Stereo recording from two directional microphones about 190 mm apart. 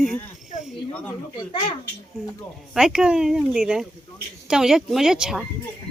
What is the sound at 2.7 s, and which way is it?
Speech, 5° right (ahead or behind).